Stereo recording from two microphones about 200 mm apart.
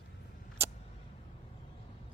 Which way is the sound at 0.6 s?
15° right (ahead or behind).